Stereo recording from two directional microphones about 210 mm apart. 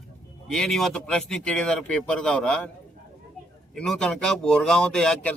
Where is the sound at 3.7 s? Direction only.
5° left (ahead or behind).